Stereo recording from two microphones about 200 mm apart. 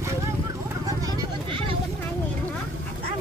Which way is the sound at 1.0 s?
20° right (ahead or behind).